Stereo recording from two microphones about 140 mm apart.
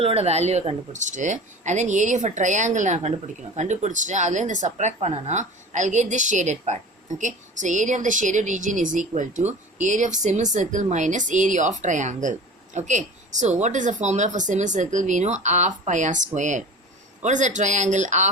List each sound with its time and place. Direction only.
0.0 s speech: 45° right (ahead or behind)
1.0 s speech: 60° right (ahead or behind)